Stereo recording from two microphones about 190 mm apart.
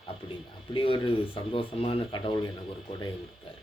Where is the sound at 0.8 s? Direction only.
30° left (ahead or behind).